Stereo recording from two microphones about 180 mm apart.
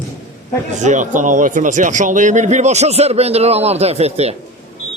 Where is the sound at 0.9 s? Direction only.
45° right (ahead or behind).